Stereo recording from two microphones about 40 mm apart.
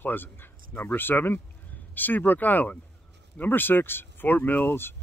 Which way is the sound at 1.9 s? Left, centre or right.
Left.